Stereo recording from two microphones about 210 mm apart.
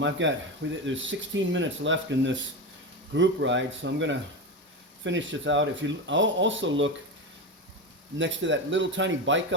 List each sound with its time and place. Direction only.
0.0 s speech: 60° right (ahead or behind)
8.2 s speech: 60° right (ahead or behind)